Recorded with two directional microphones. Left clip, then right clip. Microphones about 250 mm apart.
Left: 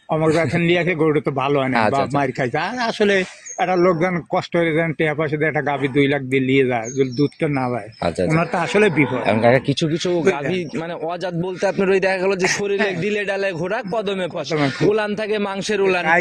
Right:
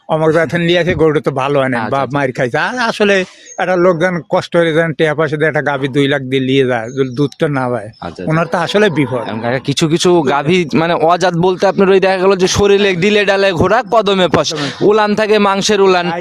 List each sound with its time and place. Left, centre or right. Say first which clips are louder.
0.1 s speech: right 6 dB; right
9.2 s speech: left 4 dB; centre
9.6 s speech: right 8 dB; right